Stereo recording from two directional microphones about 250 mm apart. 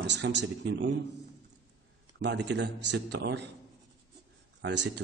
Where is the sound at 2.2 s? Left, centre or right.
Right.